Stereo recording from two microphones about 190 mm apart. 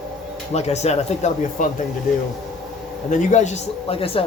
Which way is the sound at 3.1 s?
40° left (ahead or behind).